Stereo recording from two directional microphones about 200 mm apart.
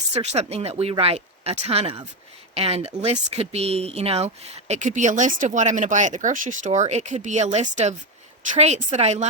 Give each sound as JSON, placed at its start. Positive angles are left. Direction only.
{"t": 0.1, "sound": "speech", "side_deg": -35}